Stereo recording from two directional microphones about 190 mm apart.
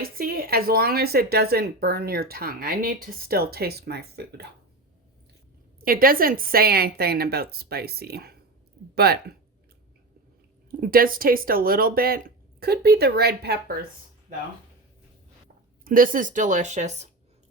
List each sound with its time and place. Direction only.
0.0 s speech: 50° right (ahead or behind)
5.8 s a woman's voice: 50° right (ahead or behind)
10.7 s speech: 50° right (ahead or behind)
15.8 s speech: 45° right (ahead or behind)